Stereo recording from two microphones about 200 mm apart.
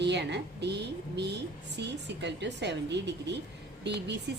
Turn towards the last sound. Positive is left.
turn(degrees=-55)  # may be behind; listen again after turning